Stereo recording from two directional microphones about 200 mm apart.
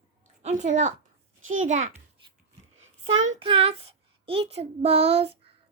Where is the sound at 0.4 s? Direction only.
35° right (ahead or behind).